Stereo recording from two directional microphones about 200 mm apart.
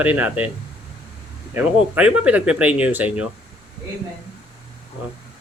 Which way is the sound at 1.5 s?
5° right (ahead or behind).